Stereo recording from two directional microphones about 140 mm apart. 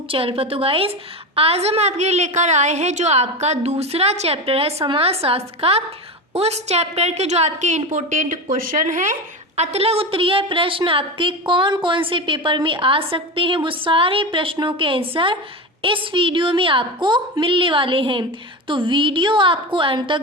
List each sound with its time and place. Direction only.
0.1 s a woman's voice: 40° right (ahead or behind); by 8.4 s 65° right (ahead or behind)
8.5 s speech: 80° right; by 9.1 s 65° right (ahead or behind)
9.6 s a woman's voice: 45° right (ahead or behind)